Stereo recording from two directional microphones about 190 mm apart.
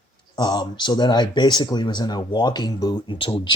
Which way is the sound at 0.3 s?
20° left (ahead or behind).